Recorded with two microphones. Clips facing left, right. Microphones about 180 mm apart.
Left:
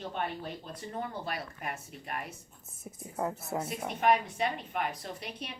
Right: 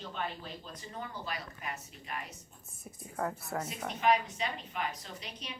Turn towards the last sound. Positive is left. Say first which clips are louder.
# left 5 dB
turn(degrees=55)  # may be behind; listen again after turning